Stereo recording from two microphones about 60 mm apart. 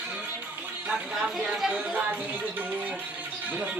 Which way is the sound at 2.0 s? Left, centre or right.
Right.